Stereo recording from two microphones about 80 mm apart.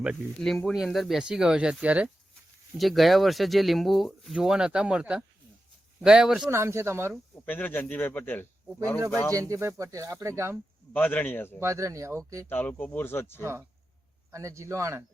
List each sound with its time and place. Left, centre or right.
0.4 s speech: centre
2.7 s speech: centre
6.5 s speech: right
7.4 s a man's voice: left
9.3 s speech: right
10.9 s a man's voice: left
11.6 s speech: right
12.5 s a man's voice: left
13.4 s speech: right